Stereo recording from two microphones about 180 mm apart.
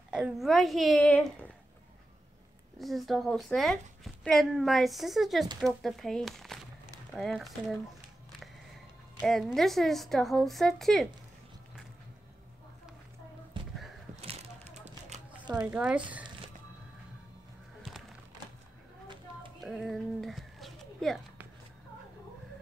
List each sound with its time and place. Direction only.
0.1 s speech: 5° right (ahead or behind)
2.8 s speech: centre (ahead or behind)
9.2 s speech: centre (ahead or behind)
14.2 s a sound: 35° right (ahead or behind)
15.6 s speech: 5° right (ahead or behind)
19.6 s a sound: centre (ahead or behind)